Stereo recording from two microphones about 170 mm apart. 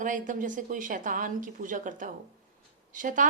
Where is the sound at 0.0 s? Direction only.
50° right (ahead or behind).